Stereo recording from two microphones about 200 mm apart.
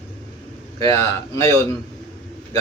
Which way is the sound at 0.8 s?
15° left (ahead or behind).